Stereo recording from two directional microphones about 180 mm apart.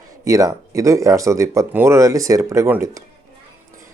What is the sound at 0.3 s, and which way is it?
Speech, 20° right (ahead or behind).